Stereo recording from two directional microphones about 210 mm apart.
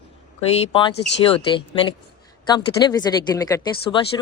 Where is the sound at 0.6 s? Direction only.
25° left (ahead or behind).